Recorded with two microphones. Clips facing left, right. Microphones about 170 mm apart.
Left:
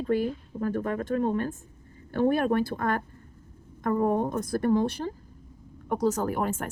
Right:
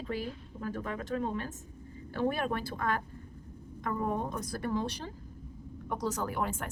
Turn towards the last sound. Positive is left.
turn(degrees=45)  # may be behind; listen again after turning